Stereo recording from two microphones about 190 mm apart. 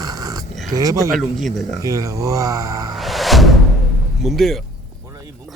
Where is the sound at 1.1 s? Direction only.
Centre (ahead or behind).